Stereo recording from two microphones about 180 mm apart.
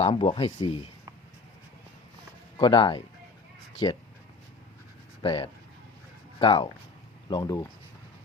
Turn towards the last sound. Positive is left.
turn(degrees=20)  # may be behind; listen again after turning